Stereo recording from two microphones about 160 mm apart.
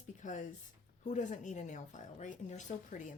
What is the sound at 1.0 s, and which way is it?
A woman's voice, 50° left (ahead or behind).